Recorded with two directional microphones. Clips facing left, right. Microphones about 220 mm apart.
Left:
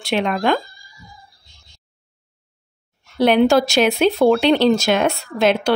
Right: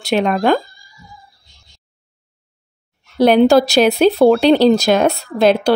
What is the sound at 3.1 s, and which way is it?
Speech, 40° right (ahead or behind).